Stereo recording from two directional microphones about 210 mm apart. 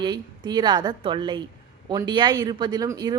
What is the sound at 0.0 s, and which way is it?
A woman's voice, 20° right (ahead or behind).